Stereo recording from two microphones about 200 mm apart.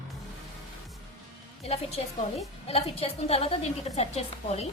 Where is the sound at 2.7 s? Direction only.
30° left (ahead or behind).